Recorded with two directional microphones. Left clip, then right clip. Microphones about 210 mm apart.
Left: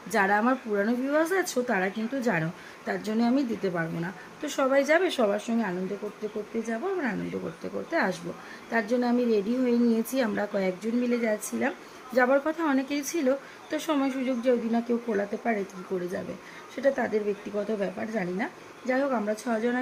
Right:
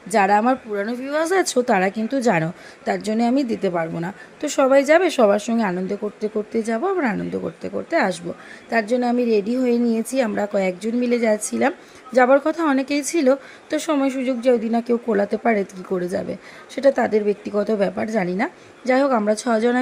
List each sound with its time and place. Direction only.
0.1 s a woman's voice: 20° right (ahead or behind)